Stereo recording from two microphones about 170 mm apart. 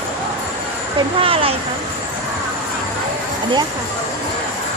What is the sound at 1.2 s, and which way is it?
Speech, 35° right (ahead or behind).